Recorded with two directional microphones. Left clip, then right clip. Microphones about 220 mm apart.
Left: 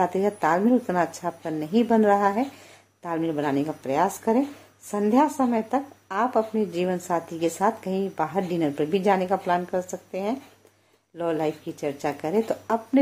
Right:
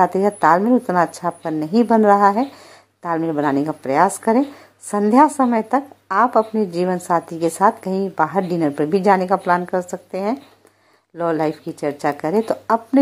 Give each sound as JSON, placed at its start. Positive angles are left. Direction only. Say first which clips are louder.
{"t": 0.0, "sound": "a woman's voice", "louder": "right 8 dB", "side_deg": -15}